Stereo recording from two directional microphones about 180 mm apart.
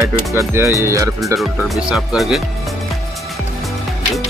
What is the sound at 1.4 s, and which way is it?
Speech, centre (ahead or behind).